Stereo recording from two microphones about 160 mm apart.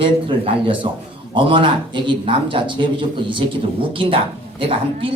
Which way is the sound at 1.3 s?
30° right (ahead or behind).